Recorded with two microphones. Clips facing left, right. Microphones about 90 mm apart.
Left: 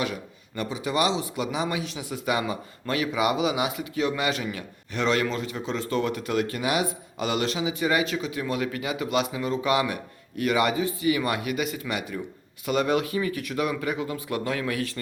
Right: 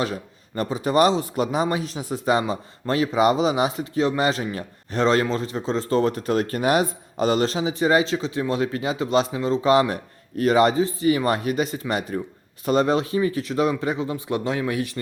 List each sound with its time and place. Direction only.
0.0 s a man's voice: 35° right (ahead or behind); by 14.9 s 20° right (ahead or behind)